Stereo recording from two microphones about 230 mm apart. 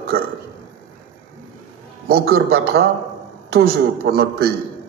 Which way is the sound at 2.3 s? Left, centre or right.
Right.